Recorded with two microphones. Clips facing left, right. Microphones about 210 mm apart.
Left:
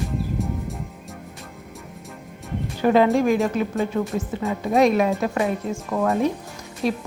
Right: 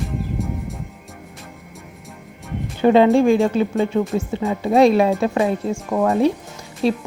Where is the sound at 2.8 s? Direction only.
25° right (ahead or behind).